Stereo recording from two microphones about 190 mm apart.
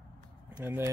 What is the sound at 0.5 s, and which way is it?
Speech, 10° right (ahead or behind).